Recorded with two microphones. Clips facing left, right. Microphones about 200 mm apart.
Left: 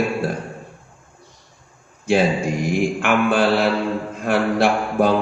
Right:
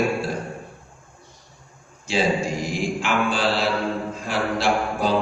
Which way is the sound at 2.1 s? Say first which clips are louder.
Left 4 dB; 60° left (ahead or behind).